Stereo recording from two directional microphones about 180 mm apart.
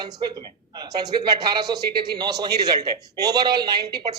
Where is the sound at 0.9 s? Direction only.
25° right (ahead or behind).